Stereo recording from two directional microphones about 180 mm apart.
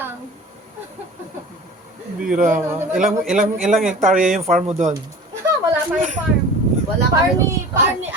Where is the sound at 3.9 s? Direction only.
45° right (ahead or behind).